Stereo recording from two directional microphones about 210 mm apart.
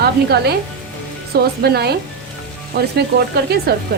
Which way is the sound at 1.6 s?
50° right (ahead or behind).